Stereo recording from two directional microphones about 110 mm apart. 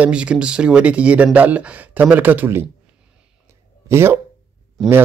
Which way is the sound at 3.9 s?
25° right (ahead or behind).